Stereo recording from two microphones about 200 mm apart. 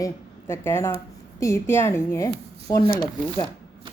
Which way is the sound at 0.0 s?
10° left (ahead or behind).